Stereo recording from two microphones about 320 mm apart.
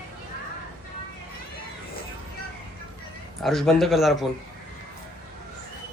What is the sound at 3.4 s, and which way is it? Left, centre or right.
Speech, centre.